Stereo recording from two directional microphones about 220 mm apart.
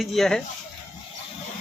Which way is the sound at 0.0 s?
Centre (ahead or behind).